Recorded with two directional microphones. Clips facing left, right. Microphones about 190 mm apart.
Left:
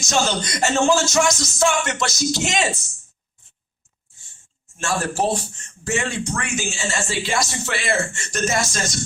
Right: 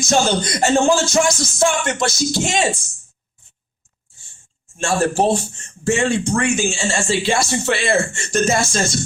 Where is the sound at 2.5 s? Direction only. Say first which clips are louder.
Right 3 dB; 30° right (ahead or behind).